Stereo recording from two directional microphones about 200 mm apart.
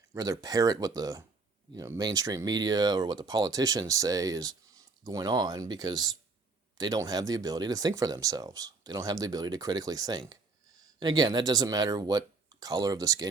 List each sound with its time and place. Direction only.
0.1 s speech: 15° right (ahead or behind)